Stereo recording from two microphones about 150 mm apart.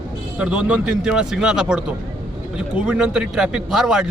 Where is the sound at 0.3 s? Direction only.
5° right (ahead or behind).